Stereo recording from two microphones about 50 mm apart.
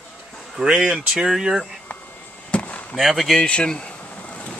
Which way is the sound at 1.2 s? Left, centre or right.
Centre.